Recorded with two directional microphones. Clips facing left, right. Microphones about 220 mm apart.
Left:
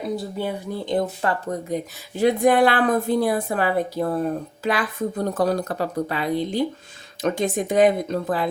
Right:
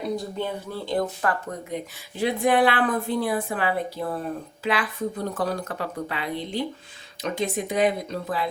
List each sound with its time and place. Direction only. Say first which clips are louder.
0.0 s speech: left 2 dB; 5° left (ahead or behind)
0.9 s speech: left 2 dB; 25° left (ahead or behind)
1.7 s speech: left 5 dB; 45° left (ahead or behind)